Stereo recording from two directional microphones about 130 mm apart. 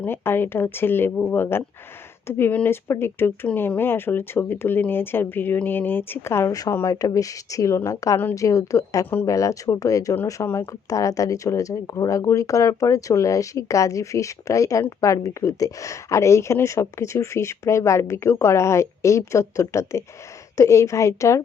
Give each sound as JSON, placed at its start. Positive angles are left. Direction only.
{"t": 0.0, "sound": "speech", "side_deg": 15}